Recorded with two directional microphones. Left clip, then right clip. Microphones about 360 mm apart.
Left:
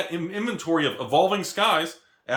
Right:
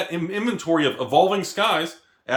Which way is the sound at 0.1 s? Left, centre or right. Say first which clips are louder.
Right 3 dB; centre.